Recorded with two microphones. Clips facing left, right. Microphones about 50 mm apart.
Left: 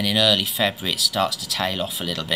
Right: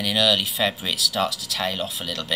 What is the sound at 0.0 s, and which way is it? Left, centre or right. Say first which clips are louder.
Speech: left 1 dB; centre.